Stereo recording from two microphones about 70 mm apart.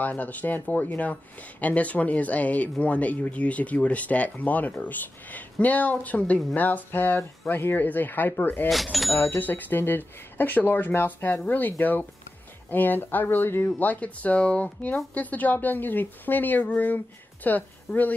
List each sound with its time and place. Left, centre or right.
0.0 s speech: left
8.6 s speech: centre
9.2 s speech: left